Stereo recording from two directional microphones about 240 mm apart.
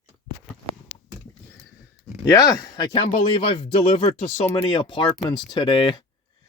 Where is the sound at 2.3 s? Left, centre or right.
Centre.